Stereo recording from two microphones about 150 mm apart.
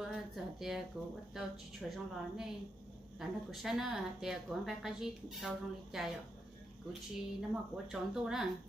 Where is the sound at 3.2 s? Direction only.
5° right (ahead or behind).